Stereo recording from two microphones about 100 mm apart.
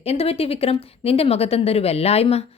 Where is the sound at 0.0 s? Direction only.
90° left.